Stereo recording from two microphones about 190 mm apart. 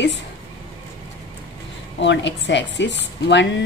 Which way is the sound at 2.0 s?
70° left (ahead or behind).